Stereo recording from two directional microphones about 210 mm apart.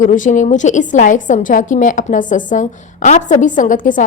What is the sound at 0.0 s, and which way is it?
A woman's voice, 35° left (ahead or behind).